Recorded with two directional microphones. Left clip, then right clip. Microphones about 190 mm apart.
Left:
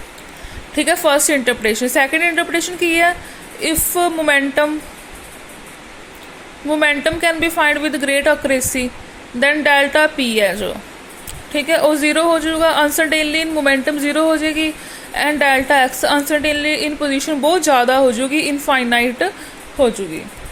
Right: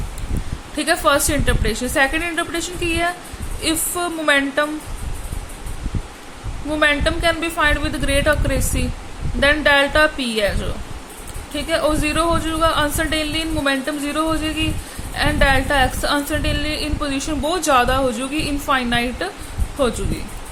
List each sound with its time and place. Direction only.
0.8 s a woman's voice: 20° left (ahead or behind)
6.7 s a woman's voice: 20° left (ahead or behind)